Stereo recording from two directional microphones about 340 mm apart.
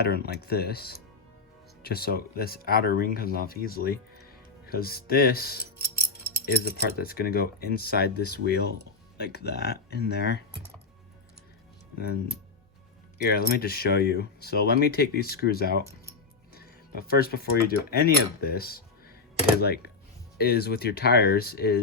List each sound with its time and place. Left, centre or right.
0.0 s speech: left
11.9 s speech: left
16.6 s music: left
17.9 s speech: left